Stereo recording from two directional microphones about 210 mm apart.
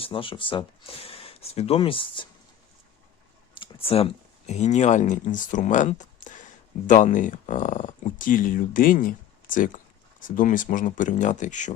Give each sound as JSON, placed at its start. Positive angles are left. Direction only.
{"t": 0.0, "sound": "speech", "side_deg": 25}
{"t": 3.5, "sound": "speech", "side_deg": 25}